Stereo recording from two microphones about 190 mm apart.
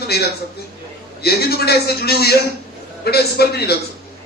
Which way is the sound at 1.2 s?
55° left (ahead or behind).